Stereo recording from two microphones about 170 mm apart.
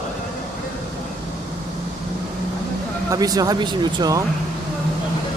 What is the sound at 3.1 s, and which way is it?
Speech, 20° right (ahead or behind).